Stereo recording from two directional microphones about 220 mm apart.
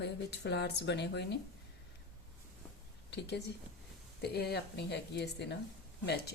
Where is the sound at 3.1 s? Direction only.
50° left (ahead or behind).